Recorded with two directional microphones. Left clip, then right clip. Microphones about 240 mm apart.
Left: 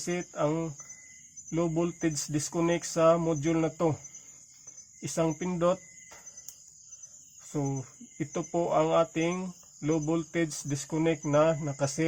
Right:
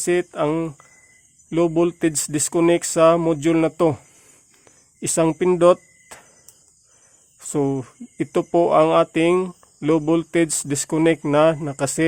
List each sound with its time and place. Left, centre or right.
0.0 s speech: right
4.9 s speech: right
7.5 s speech: right